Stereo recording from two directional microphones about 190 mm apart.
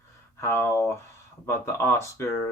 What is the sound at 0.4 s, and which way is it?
Speech, 15° left (ahead or behind).